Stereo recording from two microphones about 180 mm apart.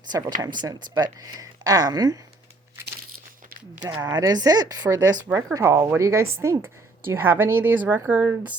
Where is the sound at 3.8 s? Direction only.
20° right (ahead or behind).